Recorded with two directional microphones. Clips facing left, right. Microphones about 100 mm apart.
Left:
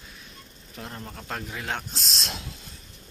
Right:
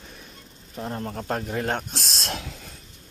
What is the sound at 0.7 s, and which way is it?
Speech, 30° right (ahead or behind).